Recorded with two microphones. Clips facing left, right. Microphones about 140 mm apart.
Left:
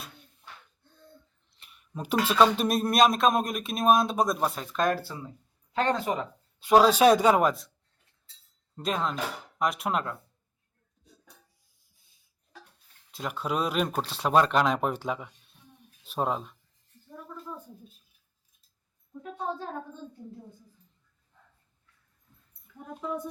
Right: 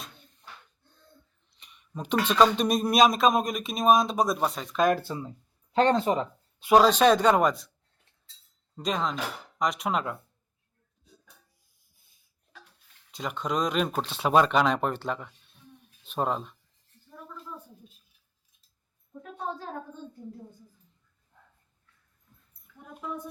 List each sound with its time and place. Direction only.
0.0 s a sound: 5° left (ahead or behind)
1.5 s a sound: centre (ahead or behind)
2.2 s speech: 5° left (ahead or behind)
4.8 s speech: 15° right (ahead or behind)
6.7 s speech: 5° left (ahead or behind)
8.7 s speech: centre (ahead or behind)
13.1 s speech: centre (ahead or behind)